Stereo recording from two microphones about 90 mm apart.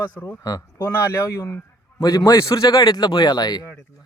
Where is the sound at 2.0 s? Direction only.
45° left (ahead or behind).